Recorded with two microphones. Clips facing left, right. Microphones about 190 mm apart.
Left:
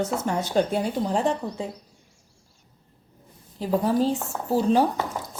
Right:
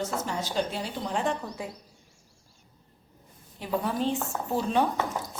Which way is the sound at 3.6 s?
35° left (ahead or behind).